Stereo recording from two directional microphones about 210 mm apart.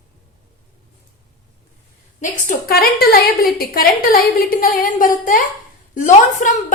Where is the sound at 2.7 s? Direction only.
45° left (ahead or behind).